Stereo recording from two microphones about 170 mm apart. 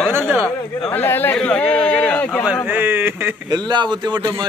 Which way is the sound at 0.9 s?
10° left (ahead or behind).